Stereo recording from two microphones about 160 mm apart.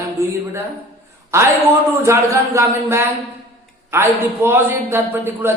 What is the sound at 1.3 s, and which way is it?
A man's voice, 15° right (ahead or behind).